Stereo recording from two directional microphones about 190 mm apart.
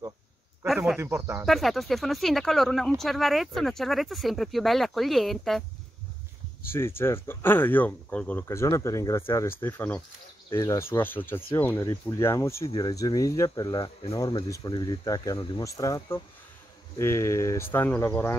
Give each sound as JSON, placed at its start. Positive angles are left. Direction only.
{"t": 0.7, "sound": "snake", "side_deg": 0}
{"t": 0.9, "sound": "speech", "side_deg": -15}
{"t": 1.4, "sound": "speech", "side_deg": 0}
{"t": 6.7, "sound": "speech", "side_deg": 10}